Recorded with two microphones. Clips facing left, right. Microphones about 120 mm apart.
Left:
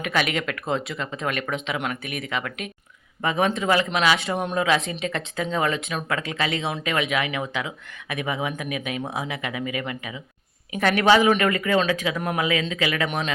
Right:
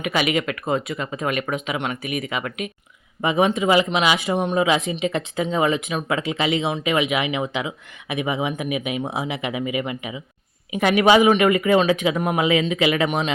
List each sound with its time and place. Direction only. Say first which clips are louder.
0.0 s speech: right 3 dB; 5° right (ahead or behind)